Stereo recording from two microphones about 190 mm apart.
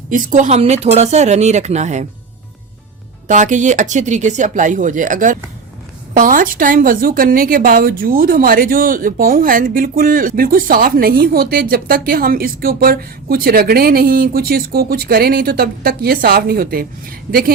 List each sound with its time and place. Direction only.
0.1 s speech: 45° right (ahead or behind)
3.2 s speech: 40° right (ahead or behind)